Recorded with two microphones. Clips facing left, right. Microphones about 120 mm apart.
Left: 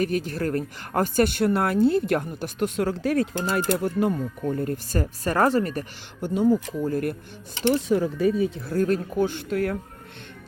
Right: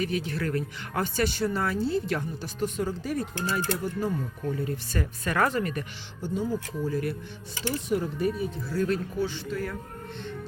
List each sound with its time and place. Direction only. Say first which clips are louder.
0.0 s speech: left 4 dB; 45° left (ahead or behind); by 4.1 s 80° left
4.4 s speech: left 5 dB; 50° left (ahead or behind)
6.2 s speech: left 8 dB; 65° left (ahead or behind)
7.6 s speech: left 7 dB; 80° left
8.7 s speech: left 3 dB; 50° left (ahead or behind); by 9.7 s 70° left (ahead or behind)